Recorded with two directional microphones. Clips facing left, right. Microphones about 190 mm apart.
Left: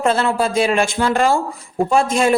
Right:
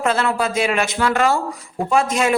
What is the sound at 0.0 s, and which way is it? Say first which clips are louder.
A woman's voice: left 2 dB; 30° left (ahead or behind).